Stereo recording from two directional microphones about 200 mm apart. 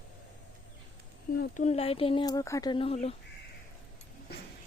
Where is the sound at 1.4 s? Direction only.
35° left (ahead or behind).